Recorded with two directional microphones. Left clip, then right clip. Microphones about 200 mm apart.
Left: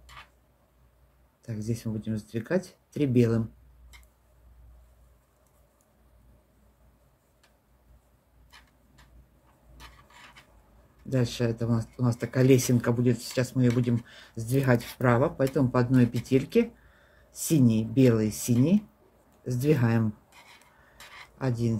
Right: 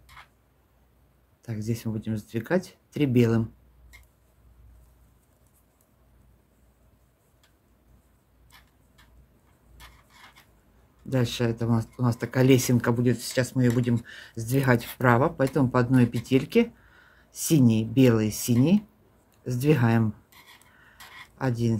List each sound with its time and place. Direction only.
1.4 s speech: 25° right (ahead or behind)
11.1 s speech: 25° right (ahead or behind)
21.4 s speech: 25° right (ahead or behind)